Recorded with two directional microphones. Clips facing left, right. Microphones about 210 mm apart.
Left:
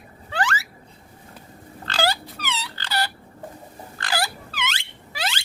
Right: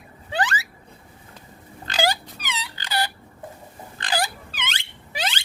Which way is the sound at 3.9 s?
20° right (ahead or behind).